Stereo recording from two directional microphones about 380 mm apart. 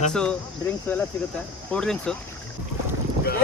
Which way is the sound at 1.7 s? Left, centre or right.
Centre.